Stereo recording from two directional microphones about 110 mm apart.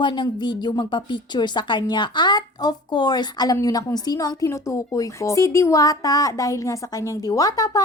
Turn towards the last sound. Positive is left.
turn(degrees=35)  # may be behind; listen again after turning